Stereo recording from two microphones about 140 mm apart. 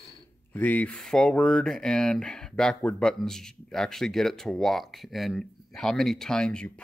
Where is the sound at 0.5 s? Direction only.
10° left (ahead or behind).